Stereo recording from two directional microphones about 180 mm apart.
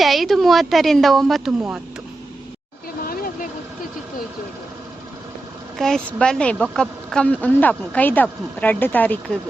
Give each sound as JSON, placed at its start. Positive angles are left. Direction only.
{"t": 0.0, "sound": "a woman's voice", "side_deg": 0}
{"t": 3.0, "sound": "a sound", "side_deg": 55}
{"t": 5.7, "sound": "a woman's voice", "side_deg": 5}